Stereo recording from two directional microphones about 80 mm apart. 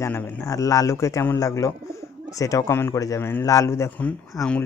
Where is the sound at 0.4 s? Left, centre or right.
Left.